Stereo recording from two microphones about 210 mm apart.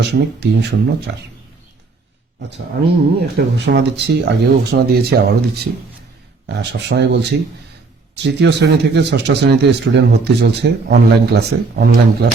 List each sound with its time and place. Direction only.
0.0 s speech: 55° right (ahead or behind)
2.8 s speech: 50° right (ahead or behind)
6.5 s speech: 55° right (ahead or behind)